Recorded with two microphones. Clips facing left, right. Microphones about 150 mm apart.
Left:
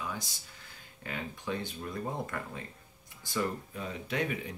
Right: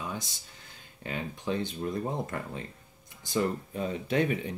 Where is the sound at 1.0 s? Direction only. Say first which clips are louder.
Right 4 dB; 25° right (ahead or behind).